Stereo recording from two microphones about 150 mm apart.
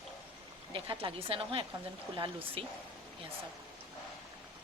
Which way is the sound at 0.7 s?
35° right (ahead or behind).